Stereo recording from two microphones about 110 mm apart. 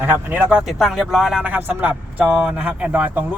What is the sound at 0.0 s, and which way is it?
Speech, 15° right (ahead or behind).